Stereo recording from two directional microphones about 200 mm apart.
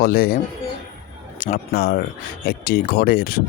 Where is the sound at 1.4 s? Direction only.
45° left (ahead or behind).